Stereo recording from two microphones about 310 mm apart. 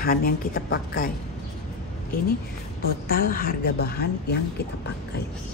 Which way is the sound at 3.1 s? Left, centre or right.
Left.